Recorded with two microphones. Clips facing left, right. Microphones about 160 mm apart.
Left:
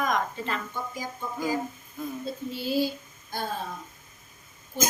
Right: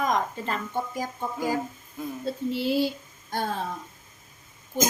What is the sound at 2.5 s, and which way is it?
Speech, 70° right (ahead or behind).